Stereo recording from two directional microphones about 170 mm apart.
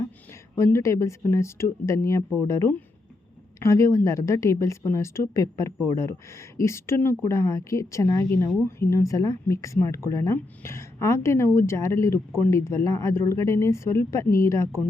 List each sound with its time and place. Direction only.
0.5 s a woman's voice: 15° left (ahead or behind)